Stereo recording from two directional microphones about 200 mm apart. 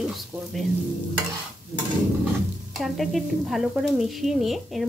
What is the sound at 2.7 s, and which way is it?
Stir, centre (ahead or behind).